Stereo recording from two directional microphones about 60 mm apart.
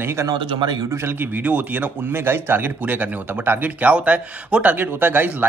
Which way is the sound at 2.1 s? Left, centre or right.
Right.